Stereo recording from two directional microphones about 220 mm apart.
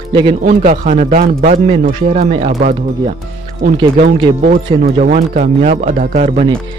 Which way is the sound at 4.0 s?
40° right (ahead or behind).